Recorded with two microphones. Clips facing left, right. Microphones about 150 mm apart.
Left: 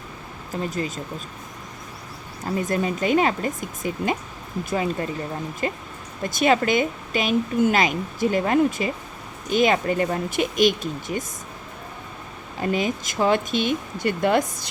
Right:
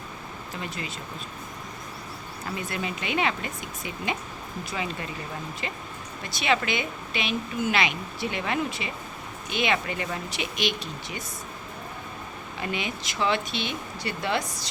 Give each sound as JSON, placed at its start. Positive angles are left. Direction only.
{"t": 0.5, "sound": "a woman's voice", "side_deg": 40}
{"t": 2.6, "sound": "a woman's voice", "side_deg": 45}
{"t": 12.5, "sound": "a woman's voice", "side_deg": 40}